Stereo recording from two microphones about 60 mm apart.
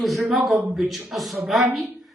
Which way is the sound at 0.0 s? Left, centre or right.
Centre.